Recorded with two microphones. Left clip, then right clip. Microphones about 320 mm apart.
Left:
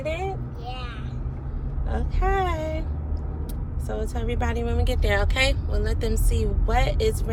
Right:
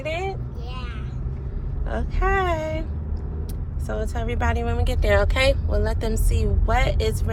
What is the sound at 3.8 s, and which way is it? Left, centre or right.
Speech, right.